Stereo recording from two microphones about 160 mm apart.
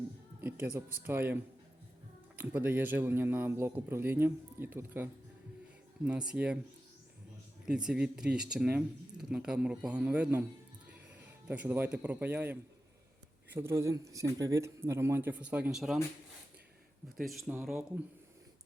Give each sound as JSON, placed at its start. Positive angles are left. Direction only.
{"t": 0.4, "sound": "a man's voice", "side_deg": -15}
{"t": 6.1, "sound": "a man's voice", "side_deg": -5}
{"t": 7.7, "sound": "speech", "side_deg": -5}
{"t": 11.4, "sound": "a man's voice", "side_deg": -10}
{"t": 17.2, "sound": "speech", "side_deg": 0}